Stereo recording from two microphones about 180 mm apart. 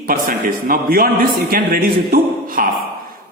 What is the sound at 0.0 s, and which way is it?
A man's voice, 50° right (ahead or behind).